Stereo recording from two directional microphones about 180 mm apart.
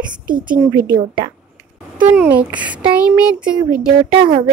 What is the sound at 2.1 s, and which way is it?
A woman's voice, 10° right (ahead or behind).